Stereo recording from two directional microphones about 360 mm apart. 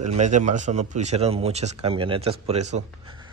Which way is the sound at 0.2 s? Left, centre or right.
Centre.